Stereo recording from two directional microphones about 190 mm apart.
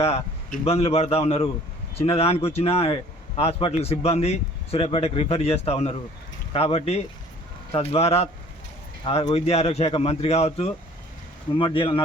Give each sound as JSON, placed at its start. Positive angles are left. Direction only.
{"t": 0.0, "sound": "speech", "side_deg": 35}
{"t": 9.3, "sound": "speech", "side_deg": 35}